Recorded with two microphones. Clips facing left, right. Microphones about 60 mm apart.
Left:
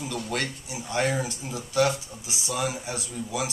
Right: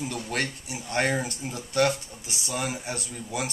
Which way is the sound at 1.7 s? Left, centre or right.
Right.